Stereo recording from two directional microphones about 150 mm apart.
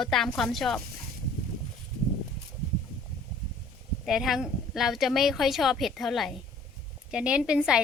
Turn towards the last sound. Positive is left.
turn(degrees=-5)  # may be behind; listen again after turning